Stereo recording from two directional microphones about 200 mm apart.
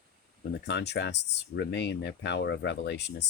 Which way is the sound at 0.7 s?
60° left (ahead or behind).